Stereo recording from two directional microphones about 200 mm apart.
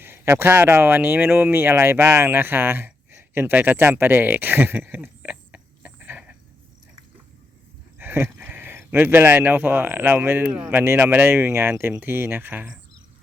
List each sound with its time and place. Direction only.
0.0 s speech: 10° right (ahead or behind)
7.9 s a sound: 10° right (ahead or behind)
8.8 s speech: 10° right (ahead or behind)